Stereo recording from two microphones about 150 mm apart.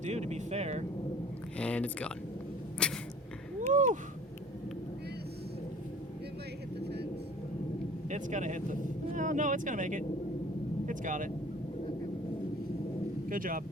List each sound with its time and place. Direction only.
0.0 s speech: 50° right (ahead or behind)
1.5 s speech: 10° left (ahead or behind)
3.7 s speech: 55° right (ahead or behind)
6.8 s vehicle: 90° right
8.1 s speech: 55° right (ahead or behind)
10.8 s vehicle: 60° right (ahead or behind)
13.2 s speech: 65° right (ahead or behind)